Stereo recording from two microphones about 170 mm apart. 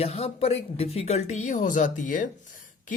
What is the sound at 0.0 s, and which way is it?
Speech, 35° left (ahead or behind).